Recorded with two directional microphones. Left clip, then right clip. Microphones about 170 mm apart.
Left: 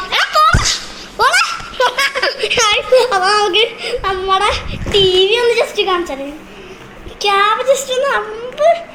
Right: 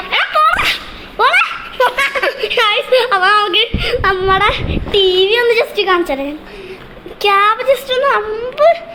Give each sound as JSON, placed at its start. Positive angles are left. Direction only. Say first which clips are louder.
{"t": 0.1, "sound": "music", "louder": "even", "side_deg": -5}
{"t": 1.1, "sound": "giggle", "louder": "right 1 dB", "side_deg": -10}
{"t": 4.0, "sound": "speech", "louder": "right 2 dB", "side_deg": -10}
{"t": 7.2, "sound": "a woman's voice", "louder": "right 1 dB", "side_deg": -15}